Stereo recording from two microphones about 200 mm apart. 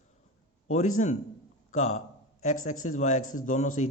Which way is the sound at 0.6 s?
35° left (ahead or behind).